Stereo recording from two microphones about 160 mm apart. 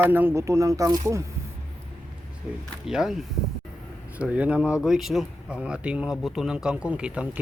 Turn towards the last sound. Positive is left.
turn(degrees=-5)  # may be behind; listen again after turning